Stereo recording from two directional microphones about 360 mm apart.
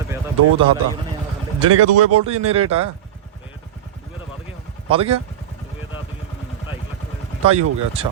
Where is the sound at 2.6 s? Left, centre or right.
Centre.